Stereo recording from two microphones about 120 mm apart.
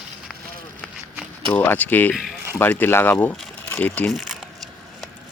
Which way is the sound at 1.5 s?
15° left (ahead or behind).